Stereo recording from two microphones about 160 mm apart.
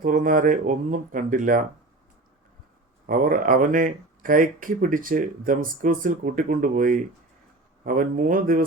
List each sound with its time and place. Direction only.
0.0 s speech: 55° right (ahead or behind)
3.1 s speech: 60° right (ahead or behind)